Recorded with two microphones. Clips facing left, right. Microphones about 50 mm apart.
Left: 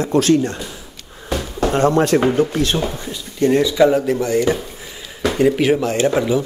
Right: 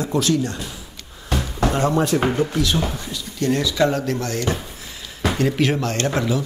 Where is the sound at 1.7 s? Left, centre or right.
Left.